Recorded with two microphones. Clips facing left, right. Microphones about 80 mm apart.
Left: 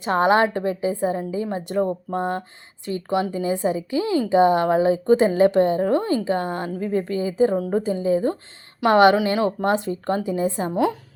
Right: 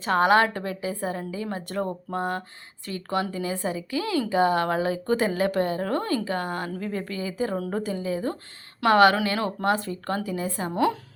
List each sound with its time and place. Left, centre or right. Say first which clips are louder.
0.0 s a woman's voice: left 2 dB; left
7.5 s a woman's voice: left 6 dB; centre
7.9 s a woman's voice: left 7 dB; left
10.7 s speech: even; centre